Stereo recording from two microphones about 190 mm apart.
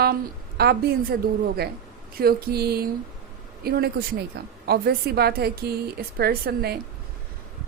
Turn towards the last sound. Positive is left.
turn(degrees=-55)  # may be behind; listen again after turning